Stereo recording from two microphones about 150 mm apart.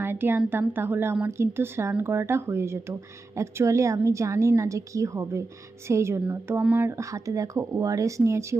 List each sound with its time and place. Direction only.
0.0 s speech: 15° right (ahead or behind)